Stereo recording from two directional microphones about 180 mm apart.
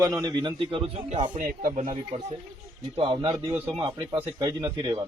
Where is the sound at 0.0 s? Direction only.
20° right (ahead or behind).